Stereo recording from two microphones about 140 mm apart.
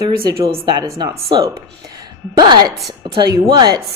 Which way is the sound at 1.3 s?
35° right (ahead or behind).